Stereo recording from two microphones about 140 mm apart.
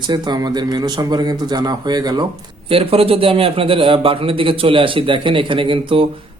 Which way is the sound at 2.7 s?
40° right (ahead or behind).